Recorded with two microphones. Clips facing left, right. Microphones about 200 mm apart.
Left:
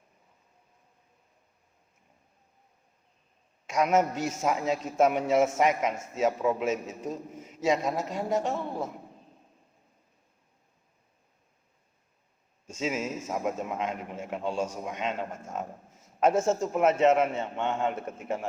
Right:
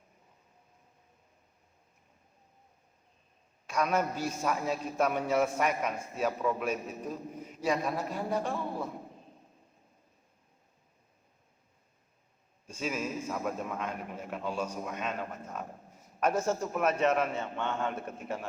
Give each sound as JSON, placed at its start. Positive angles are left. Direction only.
{"t": 3.7, "sound": "a man's voice", "side_deg": 20}
{"t": 12.6, "sound": "a man's voice", "side_deg": 25}